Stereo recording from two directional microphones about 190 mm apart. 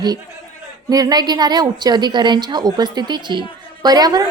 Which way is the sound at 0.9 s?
20° right (ahead or behind).